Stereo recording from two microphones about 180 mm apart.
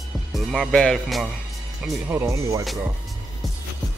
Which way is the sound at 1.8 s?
10° right (ahead or behind).